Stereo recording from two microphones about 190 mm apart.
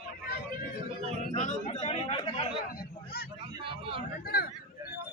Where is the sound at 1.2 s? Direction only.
40° left (ahead or behind).